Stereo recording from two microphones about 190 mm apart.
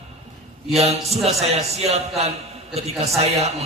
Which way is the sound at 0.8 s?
35° right (ahead or behind).